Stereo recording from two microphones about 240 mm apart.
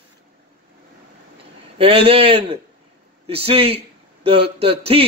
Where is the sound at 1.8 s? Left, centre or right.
Right.